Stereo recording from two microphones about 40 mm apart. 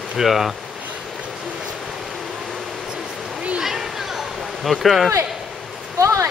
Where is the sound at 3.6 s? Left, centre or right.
Centre.